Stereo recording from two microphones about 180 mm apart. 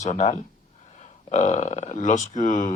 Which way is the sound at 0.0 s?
40° left (ahead or behind).